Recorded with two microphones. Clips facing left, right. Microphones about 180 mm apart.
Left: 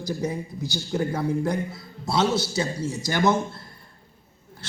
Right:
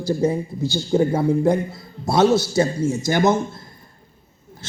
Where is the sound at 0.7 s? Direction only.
50° right (ahead or behind).